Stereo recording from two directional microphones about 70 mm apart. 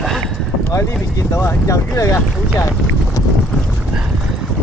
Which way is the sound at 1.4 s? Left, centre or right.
Left.